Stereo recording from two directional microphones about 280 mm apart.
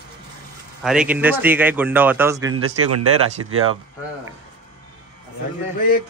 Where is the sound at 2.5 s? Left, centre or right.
Right.